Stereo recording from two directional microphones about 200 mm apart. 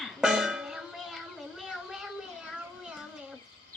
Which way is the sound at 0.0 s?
5° right (ahead or behind).